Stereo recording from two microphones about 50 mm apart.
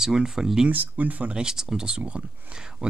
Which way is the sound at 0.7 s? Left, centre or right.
Right.